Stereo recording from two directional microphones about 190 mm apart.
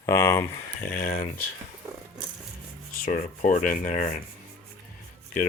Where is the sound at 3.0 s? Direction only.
45° left (ahead or behind).